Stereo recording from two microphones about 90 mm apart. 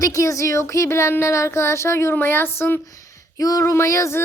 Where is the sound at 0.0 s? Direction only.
40° left (ahead or behind).